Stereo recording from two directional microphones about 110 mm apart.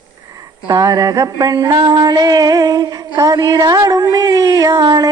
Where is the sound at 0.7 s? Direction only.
35° right (ahead or behind).